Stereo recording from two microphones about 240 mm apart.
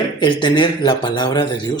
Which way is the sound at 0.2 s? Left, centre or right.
Centre.